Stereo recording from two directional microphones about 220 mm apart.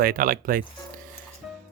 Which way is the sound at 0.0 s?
40° right (ahead or behind).